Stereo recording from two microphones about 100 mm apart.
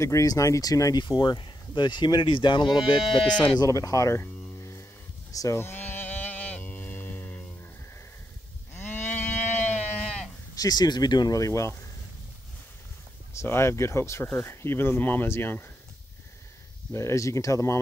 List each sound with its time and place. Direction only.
0.0 s speech: 35° left (ahead or behind)
1.0 s speech: 45° left (ahead or behind)
5.6 s sheep: 20° left (ahead or behind)
8.7 s sheep: 20° left (ahead or behind)
10.5 s speech: 40° left (ahead or behind)
13.3 s speech: 25° left (ahead or behind)
16.9 s speech: 30° left (ahead or behind)